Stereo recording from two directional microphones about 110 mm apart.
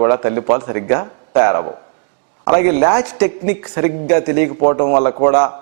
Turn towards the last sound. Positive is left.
turn(degrees=-15)  # may be behind; listen again after turning